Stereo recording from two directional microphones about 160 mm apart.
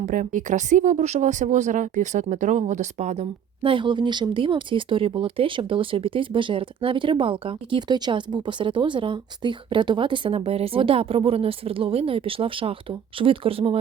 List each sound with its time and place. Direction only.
0.0 s speech: 55° right (ahead or behind)
3.6 s speech: 30° right (ahead or behind)